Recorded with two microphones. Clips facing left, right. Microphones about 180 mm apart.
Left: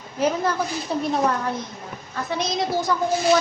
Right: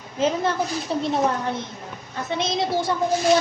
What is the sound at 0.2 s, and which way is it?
A woman's voice, 20° right (ahead or behind).